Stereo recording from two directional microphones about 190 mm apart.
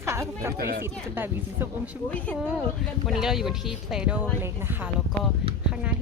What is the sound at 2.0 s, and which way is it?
Speech, 10° left (ahead or behind).